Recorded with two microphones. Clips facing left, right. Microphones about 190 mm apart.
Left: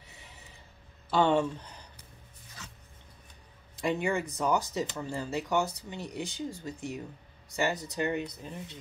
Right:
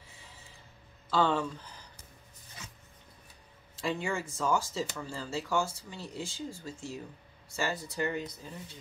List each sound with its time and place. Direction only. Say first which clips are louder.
0.1 s a sound: left 3 dB; 20° left (ahead or behind)
1.1 s speech: left 3 dB; 20° left (ahead or behind)
3.7 s speech: left 4 dB; 20° left (ahead or behind)